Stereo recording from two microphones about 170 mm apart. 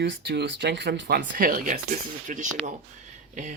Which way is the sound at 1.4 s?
55° right (ahead or behind).